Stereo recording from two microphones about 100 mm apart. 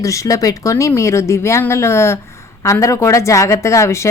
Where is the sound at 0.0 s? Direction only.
30° left (ahead or behind).